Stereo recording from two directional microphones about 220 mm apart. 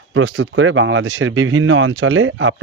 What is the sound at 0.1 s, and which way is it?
Speech, 65° right (ahead or behind).